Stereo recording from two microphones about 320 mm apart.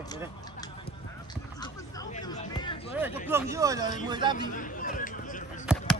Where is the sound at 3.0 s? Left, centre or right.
Centre.